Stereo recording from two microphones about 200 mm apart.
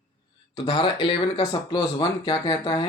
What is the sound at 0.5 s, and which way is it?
Speech, 25° left (ahead or behind).